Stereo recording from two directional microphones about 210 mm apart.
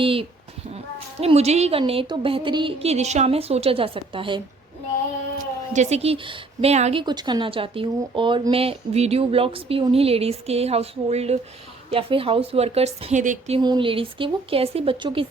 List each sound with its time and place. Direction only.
0.0 s a woman's voice: 25° right (ahead or behind)
5.7 s speech: 30° right (ahead or behind)
7.0 s speech: 20° right (ahead or behind); by 13.6 s 35° right (ahead or behind)
13.6 s speech: 20° right (ahead or behind)